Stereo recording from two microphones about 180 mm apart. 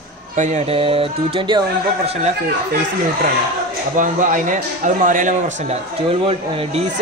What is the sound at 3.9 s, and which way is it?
A man's voice, 45° right (ahead or behind).